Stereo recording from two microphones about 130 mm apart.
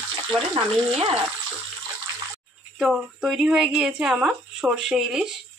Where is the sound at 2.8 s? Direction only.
5° right (ahead or behind).